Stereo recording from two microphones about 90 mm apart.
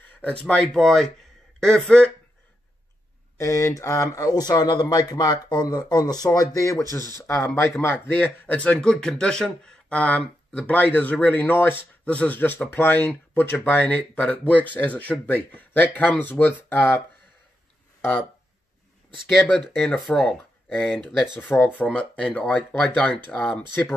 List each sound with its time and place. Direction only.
0.2 s speech: 15° left (ahead or behind)
3.3 s speech: 35° left (ahead or behind)
19.5 s speech: 5° left (ahead or behind)
21.4 s speech: 20° left (ahead or behind)